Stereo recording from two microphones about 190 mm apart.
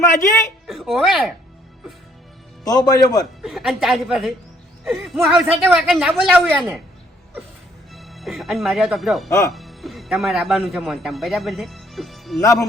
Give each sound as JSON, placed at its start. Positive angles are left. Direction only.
{"t": 0.0, "sound": "a woman's voice", "side_deg": 15}
{"t": 0.7, "sound": "a woman's voice", "side_deg": 0}
{"t": 2.6, "sound": "speech", "side_deg": 20}
{"t": 3.4, "sound": "a woman's voice", "side_deg": 0}
{"t": 7.9, "sound": "speech", "side_deg": 0}